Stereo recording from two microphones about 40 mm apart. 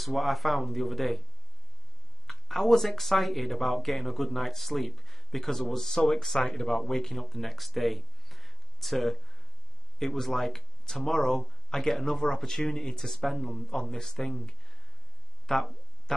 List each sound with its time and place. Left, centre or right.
0.0 s speech: centre
2.2 s speech: centre
15.4 s a sound: centre